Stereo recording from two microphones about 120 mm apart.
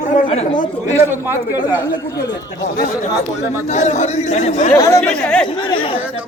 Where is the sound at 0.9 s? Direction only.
20° right (ahead or behind).